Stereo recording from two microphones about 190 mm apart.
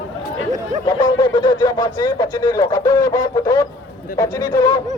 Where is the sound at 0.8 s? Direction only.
20° left (ahead or behind).